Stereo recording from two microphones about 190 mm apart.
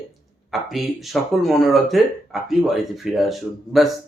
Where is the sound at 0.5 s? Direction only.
Centre (ahead or behind).